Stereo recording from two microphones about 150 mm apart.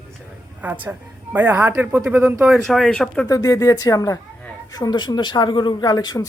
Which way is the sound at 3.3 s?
25° left (ahead or behind).